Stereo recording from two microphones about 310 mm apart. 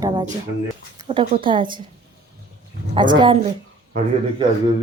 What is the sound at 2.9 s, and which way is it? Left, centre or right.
Speech, centre.